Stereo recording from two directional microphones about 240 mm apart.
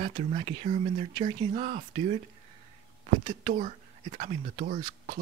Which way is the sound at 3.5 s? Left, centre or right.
Right.